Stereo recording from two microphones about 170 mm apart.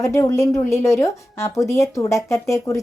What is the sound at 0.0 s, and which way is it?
A child's voice, 15° left (ahead or behind).